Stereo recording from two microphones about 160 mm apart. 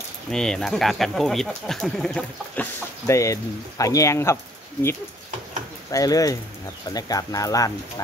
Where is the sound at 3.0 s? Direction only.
20° left (ahead or behind).